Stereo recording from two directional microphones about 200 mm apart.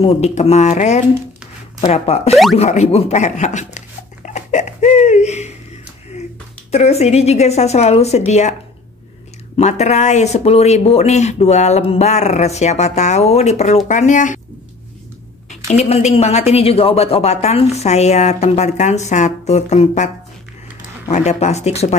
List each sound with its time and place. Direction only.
0.0 s a woman's voice: 30° left (ahead or behind)
6.7 s a woman's voice: 30° left (ahead or behind)
9.6 s a woman's voice: 35° left (ahead or behind)
15.5 s a woman's voice: 35° left (ahead or behind)
21.1 s a woman's voice: 35° left (ahead or behind)